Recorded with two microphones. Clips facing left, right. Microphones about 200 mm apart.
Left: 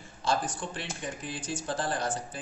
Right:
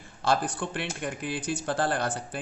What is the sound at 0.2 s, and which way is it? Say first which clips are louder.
Speech: right 3 dB; 60° right (ahead or behind).